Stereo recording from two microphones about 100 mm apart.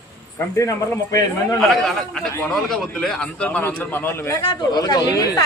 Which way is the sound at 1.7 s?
Centre (ahead or behind).